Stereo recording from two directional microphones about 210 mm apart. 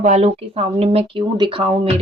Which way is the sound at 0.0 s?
35° right (ahead or behind).